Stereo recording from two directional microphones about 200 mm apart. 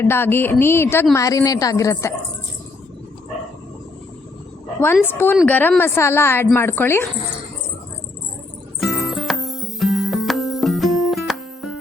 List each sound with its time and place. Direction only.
0.0 s a woman's voice: 10° left (ahead or behind)
5.0 s a woman's voice: 10° left (ahead or behind)
8.8 s music: centre (ahead or behind)